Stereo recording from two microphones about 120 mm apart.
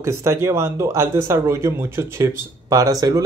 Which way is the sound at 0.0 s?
25° right (ahead or behind).